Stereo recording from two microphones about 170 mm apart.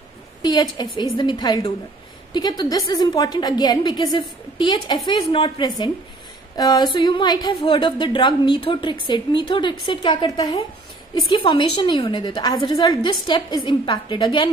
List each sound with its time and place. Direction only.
0.4 s a woman's voice: 25° left (ahead or behind)